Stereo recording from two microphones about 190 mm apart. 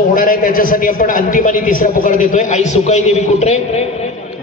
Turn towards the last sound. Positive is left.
turn(degrees=35)  # may be behind; listen again after turning